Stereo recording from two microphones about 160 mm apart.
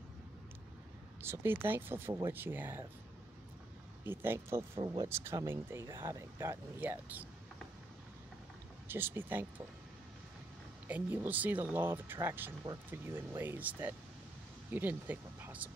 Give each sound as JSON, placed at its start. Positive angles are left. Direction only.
{"t": 1.2, "sound": "speech", "side_deg": -15}
{"t": 4.0, "sound": "speech", "side_deg": -15}
{"t": 4.6, "sound": "speech", "side_deg": -25}
{"t": 8.8, "sound": "speech", "side_deg": -15}
{"t": 10.9, "sound": "speech", "side_deg": -10}